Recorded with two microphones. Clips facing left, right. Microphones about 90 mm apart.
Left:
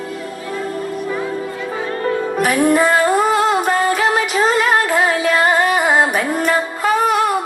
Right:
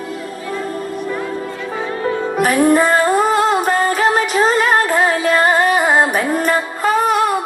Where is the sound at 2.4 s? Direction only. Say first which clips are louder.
Right 2 dB; 40° right (ahead or behind).